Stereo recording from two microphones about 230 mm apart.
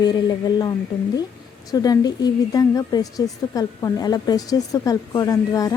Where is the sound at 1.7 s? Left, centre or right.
Centre.